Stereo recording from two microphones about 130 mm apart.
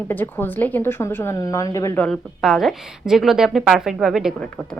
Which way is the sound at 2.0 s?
Centre (ahead or behind).